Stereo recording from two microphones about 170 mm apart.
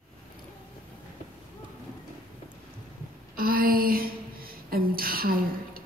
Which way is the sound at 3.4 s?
55° right (ahead or behind).